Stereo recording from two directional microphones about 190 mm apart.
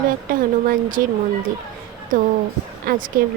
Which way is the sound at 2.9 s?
45° right (ahead or behind).